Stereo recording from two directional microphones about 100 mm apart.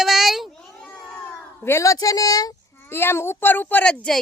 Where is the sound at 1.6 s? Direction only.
30° left (ahead or behind).